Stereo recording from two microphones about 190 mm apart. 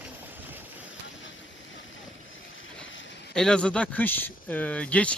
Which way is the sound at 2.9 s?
80° left.